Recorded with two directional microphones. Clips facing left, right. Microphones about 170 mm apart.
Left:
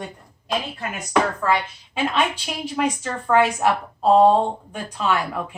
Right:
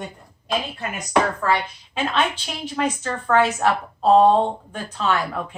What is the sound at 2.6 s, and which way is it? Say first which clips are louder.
A woman's voice: even; 10° left (ahead or behind).